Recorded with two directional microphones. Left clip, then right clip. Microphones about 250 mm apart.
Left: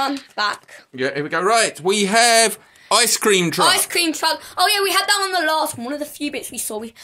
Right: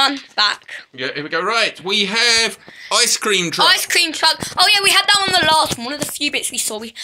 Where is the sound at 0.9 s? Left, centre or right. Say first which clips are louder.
Left 1 dB; left.